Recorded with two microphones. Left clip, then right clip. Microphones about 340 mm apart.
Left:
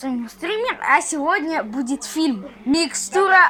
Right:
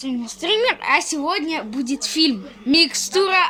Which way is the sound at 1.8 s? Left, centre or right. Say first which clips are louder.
Right 3 dB; centre.